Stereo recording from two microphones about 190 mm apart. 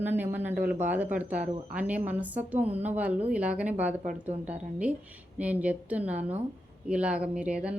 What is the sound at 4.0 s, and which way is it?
Speech, 40° right (ahead or behind).